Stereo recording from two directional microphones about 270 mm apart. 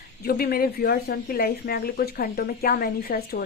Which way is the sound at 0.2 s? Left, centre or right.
Left.